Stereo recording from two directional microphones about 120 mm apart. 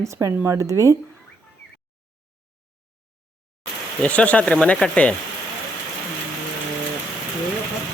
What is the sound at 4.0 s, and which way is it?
Speech, 10° left (ahead or behind).